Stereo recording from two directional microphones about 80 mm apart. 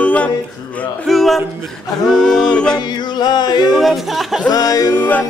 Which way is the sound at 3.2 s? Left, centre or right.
Left.